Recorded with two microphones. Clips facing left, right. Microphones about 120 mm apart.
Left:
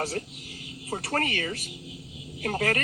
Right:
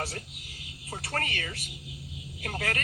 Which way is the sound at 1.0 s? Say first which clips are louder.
Left 5 dB; 45° left (ahead or behind).